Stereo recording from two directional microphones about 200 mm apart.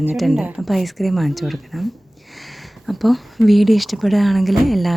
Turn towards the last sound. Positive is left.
turn(degrees=0)  # may be behind; listen again after turning